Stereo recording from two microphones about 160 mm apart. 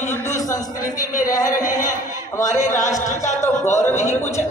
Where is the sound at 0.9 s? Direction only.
55° left (ahead or behind).